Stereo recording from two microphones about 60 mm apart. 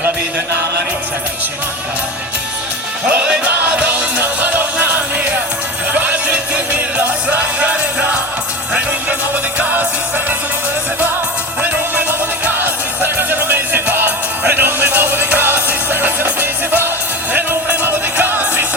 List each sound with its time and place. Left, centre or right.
3.2 s music: right
12.5 s music: right